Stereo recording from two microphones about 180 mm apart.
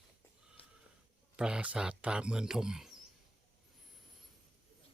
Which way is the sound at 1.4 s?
5° right (ahead or behind).